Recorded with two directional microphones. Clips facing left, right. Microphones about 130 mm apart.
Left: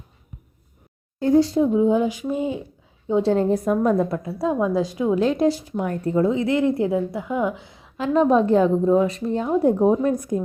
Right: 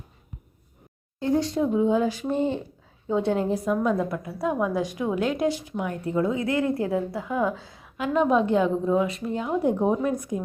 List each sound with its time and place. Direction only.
1.4 s a woman's voice: 30° left (ahead or behind)
2.3 s speech: 5° left (ahead or behind)
3.1 s a woman's voice: 30° left (ahead or behind)
3.5 s a woman's voice: 45° left (ahead or behind)
4.1 s a woman's voice: 30° left (ahead or behind)
7.9 s a woman's voice: 35° left (ahead or behind)
10.1 s a woman's voice: 40° left (ahead or behind)